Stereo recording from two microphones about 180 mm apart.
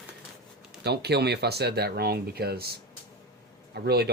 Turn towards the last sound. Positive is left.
turn(degrees=-65)  # may be behind; listen again after turning